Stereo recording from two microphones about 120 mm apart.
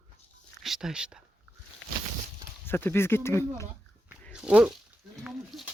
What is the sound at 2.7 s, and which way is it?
Speech, 20° left (ahead or behind).